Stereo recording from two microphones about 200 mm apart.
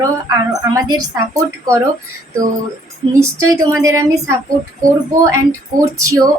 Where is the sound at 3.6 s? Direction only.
15° right (ahead or behind).